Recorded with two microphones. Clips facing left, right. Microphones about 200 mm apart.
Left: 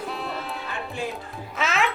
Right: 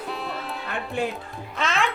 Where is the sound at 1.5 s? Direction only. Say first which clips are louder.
Even; 5° left (ahead or behind).